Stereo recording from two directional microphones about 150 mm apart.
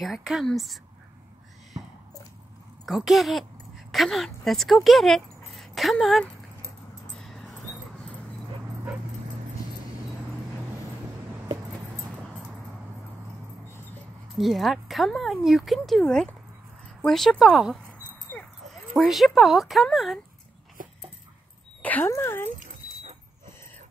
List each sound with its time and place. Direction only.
0.0 s speech: centre (ahead or behind)
1.8 s a sound: 25° right (ahead or behind)
2.8 s speech: centre (ahead or behind)
7.2 s dog: centre (ahead or behind)
14.3 s speech: centre (ahead or behind)
21.8 s speech: 15° left (ahead or behind)